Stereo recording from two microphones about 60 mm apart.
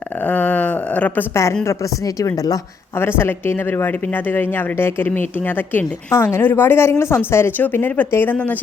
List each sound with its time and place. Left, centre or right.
0.2 s a sound: left
1.3 s speech: left
1.6 s speech: left
3.0 s speech: left
6.1 s speech: left